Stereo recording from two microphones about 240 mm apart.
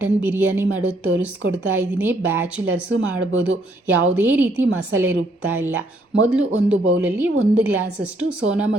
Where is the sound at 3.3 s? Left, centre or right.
Right.